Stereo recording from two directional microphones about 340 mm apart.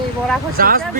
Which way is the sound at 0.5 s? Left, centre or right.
Right.